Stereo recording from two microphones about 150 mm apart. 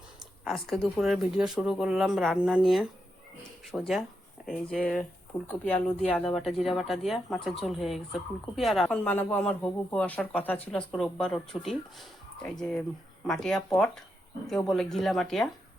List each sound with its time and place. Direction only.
0.4 s speech: centre (ahead or behind)
3.6 s speech: centre (ahead or behind)
9.0 s speech: 10° left (ahead or behind)